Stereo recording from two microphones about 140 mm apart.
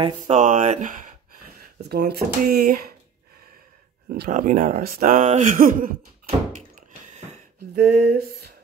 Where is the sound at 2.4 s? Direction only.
90° right.